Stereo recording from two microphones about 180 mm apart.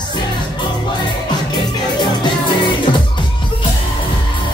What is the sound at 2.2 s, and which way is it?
Music, 25° left (ahead or behind).